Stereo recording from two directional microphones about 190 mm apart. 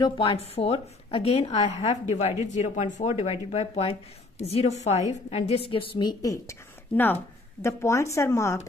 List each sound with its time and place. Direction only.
0.0 s a woman's voice: 30° left (ahead or behind)
7.6 s speech: 15° left (ahead or behind)